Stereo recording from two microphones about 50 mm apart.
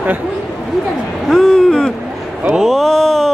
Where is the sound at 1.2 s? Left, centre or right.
Centre.